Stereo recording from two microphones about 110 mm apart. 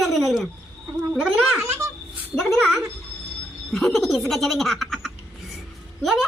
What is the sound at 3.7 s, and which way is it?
Frog, centre (ahead or behind).